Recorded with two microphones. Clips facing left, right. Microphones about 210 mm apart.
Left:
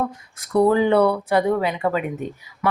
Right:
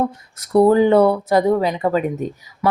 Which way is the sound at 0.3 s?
40° right (ahead or behind).